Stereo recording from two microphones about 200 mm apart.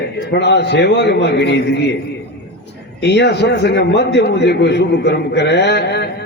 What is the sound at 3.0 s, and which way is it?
A man's voice, 60° left (ahead or behind).